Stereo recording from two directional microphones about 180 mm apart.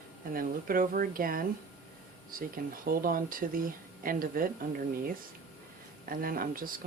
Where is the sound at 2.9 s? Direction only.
50° right (ahead or behind).